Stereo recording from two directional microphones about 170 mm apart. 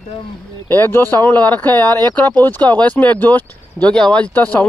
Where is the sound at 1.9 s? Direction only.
25° right (ahead or behind).